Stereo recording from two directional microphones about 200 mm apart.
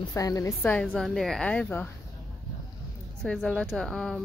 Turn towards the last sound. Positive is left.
turn(degrees=0)  # may be behind; listen again after turning